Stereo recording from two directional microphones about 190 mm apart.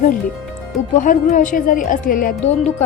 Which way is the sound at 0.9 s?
40° left (ahead or behind).